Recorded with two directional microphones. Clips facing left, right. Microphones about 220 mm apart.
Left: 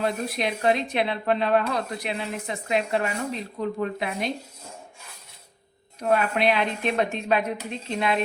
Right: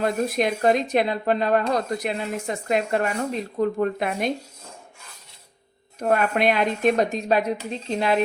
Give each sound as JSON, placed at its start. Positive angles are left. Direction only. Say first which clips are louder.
{"t": 0.0, "sound": "speech", "louder": "right 4 dB", "side_deg": -45}
{"t": 6.0, "sound": "speech", "louder": "right 2 dB", "side_deg": -50}